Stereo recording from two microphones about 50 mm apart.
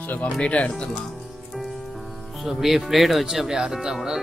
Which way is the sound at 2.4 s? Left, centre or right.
Centre.